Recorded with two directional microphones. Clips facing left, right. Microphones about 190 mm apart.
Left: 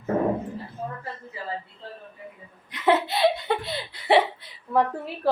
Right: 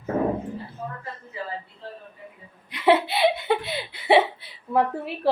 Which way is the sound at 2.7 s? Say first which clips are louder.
Right 2 dB; 10° right (ahead or behind).